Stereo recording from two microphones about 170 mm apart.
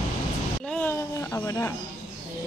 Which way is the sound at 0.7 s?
10° left (ahead or behind).